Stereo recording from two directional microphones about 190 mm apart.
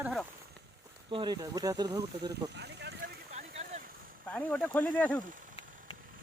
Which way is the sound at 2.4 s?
60° right (ahead or behind).